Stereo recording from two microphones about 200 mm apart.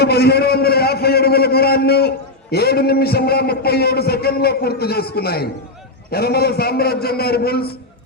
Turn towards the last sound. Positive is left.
turn(degrees=50)  # may be behind; listen again after turning